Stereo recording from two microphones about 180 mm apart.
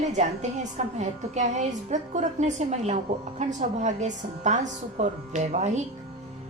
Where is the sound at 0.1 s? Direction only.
40° right (ahead or behind).